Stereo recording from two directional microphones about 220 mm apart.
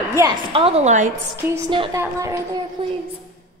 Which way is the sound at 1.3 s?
10° right (ahead or behind).